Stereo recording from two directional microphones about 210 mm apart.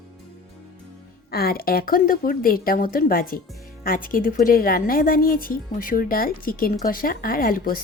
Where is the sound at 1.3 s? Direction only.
45° left (ahead or behind).